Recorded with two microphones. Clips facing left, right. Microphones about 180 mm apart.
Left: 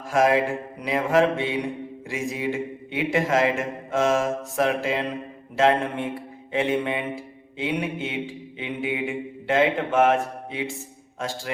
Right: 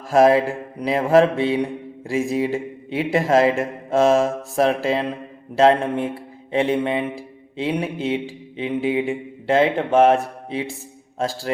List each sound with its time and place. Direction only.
0.1 s mantra: 35° right (ahead or behind)